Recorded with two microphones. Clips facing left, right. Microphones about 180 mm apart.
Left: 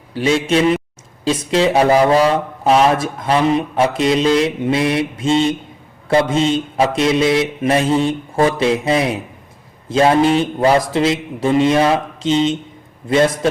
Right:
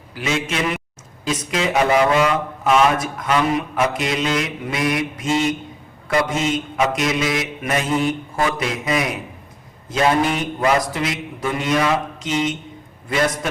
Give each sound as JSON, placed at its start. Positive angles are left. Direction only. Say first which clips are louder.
{"t": 0.1, "sound": "speech", "louder": "left 8 dB", "side_deg": 30}
{"t": 6.1, "sound": "mantra", "louder": "left 5 dB", "side_deg": 30}